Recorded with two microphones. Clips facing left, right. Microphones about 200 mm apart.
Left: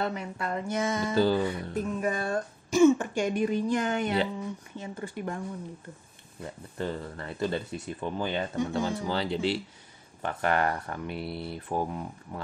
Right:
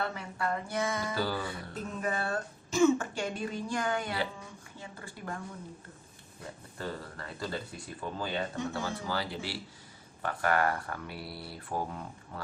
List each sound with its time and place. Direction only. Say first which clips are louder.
0.0 s speech: left 3 dB; 20° left (ahead or behind)
6.8 s speech: left 6 dB; 25° left (ahead or behind)